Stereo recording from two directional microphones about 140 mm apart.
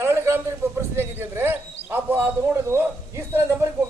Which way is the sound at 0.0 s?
20° right (ahead or behind).